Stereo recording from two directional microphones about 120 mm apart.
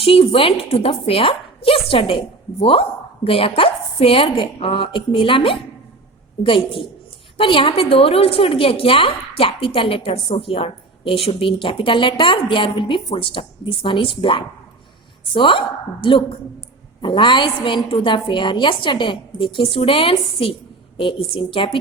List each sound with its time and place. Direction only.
0.0 s a woman's voice: 50° left (ahead or behind)